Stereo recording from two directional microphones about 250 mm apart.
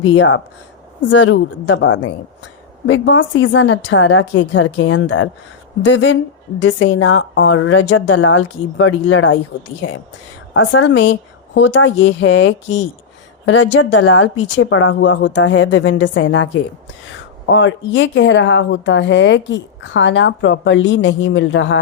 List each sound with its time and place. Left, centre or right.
0.0 s speech: left
17.5 s speech: left